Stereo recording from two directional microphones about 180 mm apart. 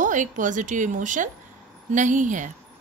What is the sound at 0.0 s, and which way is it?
Speech, 45° right (ahead or behind).